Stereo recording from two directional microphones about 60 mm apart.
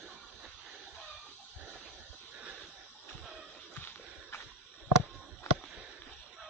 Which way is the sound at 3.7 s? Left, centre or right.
Left.